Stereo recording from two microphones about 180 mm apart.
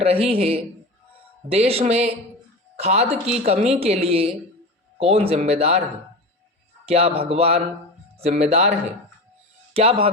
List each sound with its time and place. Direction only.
0.0 s a woman's voice: 35° right (ahead or behind)
6.8 s a woman's voice: 35° right (ahead or behind)
9.7 s a woman's voice: 30° right (ahead or behind)